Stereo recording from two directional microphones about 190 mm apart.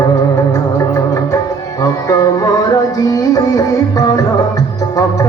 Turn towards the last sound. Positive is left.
turn(degrees=20)  # may be behind; listen again after turning